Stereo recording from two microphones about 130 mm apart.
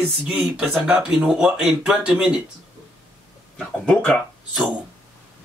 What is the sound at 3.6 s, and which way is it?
Speech, 5° left (ahead or behind).